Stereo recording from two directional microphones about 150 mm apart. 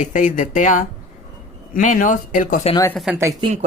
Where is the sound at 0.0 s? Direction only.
60° left (ahead or behind).